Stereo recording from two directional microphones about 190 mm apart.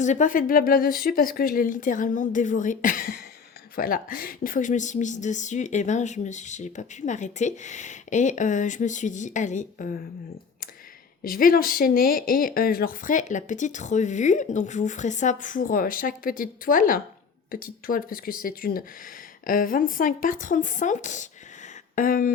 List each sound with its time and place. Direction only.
0.0 s a woman's voice: 40° left (ahead or behind)
11.2 s speech: 50° left (ahead or behind)